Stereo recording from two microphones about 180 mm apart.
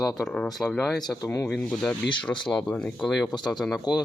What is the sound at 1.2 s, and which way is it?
Speech, 15° left (ahead or behind).